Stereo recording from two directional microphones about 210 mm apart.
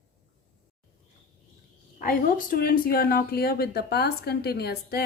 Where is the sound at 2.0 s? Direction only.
40° left (ahead or behind).